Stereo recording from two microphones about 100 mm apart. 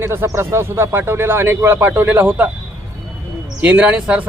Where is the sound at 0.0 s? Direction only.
25° right (ahead or behind).